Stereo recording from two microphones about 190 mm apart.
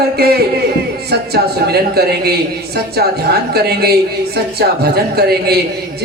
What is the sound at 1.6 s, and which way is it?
Speech, 55° right (ahead or behind).